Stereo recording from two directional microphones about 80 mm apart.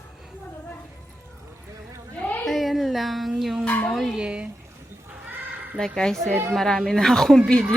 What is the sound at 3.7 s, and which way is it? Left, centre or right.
Dog, centre.